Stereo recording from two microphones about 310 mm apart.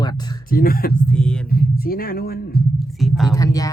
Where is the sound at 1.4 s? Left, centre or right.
Left.